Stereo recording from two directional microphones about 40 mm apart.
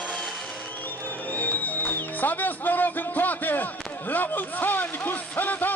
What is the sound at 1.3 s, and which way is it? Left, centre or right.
Music, left.